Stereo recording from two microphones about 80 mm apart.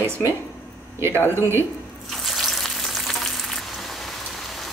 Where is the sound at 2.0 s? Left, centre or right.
Centre.